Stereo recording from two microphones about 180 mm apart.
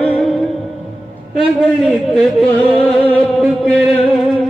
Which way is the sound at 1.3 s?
Centre (ahead or behind).